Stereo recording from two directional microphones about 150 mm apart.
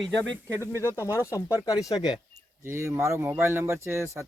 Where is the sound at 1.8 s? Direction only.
25° left (ahead or behind).